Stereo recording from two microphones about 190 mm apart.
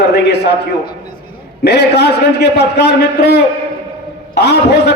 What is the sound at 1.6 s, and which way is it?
A man's voice, 60° left (ahead or behind).